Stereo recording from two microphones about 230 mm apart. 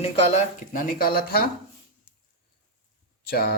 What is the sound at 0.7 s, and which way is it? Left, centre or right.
Speech, left.